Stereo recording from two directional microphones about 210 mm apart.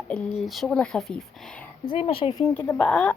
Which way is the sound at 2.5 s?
10° left (ahead or behind).